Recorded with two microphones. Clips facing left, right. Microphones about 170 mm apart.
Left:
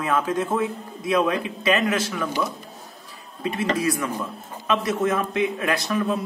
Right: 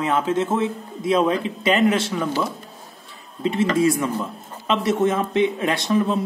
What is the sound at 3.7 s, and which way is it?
Speech, 25° right (ahead or behind).